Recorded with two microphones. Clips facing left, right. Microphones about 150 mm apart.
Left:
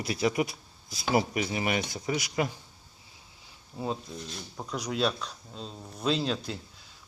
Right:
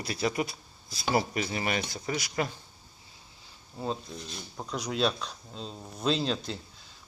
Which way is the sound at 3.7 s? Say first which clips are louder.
Left 1 dB; 5° left (ahead or behind).